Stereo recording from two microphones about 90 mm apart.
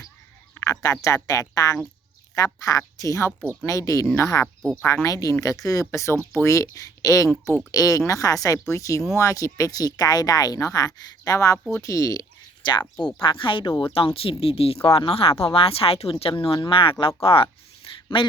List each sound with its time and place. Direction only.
0.6 s speech: 40° left (ahead or behind)
12.6 s speech: 55° left (ahead or behind)
13.2 s speech: 75° left (ahead or behind)
17.2 s speech: 90° left
18.1 s speech: 75° left (ahead or behind)